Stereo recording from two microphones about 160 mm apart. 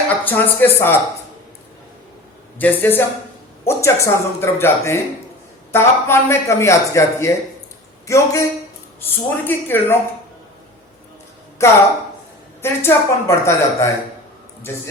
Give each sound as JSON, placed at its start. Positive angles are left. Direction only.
{"t": 0.1, "sound": "speech", "side_deg": 10}
{"t": 2.6, "sound": "a man's voice", "side_deg": 10}
{"t": 11.6, "sound": "speech", "side_deg": 20}